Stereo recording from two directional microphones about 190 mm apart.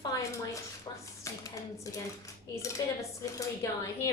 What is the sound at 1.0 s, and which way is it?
A woman's voice, 15° left (ahead or behind).